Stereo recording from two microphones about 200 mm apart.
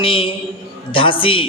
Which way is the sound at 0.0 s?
25° left (ahead or behind).